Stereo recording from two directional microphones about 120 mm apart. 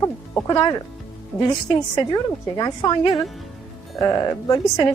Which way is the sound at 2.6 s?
35° left (ahead or behind).